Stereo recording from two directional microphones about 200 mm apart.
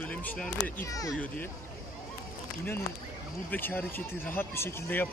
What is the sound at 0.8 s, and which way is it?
Speech, 15° left (ahead or behind).